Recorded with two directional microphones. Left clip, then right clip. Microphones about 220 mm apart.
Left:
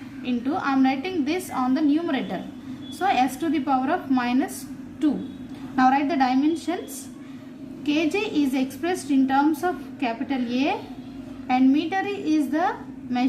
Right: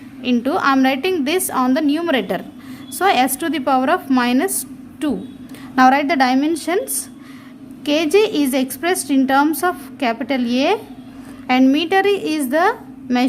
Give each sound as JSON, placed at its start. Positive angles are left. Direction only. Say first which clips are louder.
{"t": 0.3, "sound": "a woman's voice", "louder": "right 9 dB", "side_deg": -50}
{"t": 5.7, "sound": "a woman's voice", "louder": "right 7 dB", "side_deg": -50}
{"t": 7.9, "sound": "a woman's voice", "louder": "right 9 dB", "side_deg": -50}